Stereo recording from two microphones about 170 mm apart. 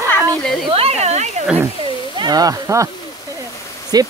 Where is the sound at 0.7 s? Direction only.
35° right (ahead or behind).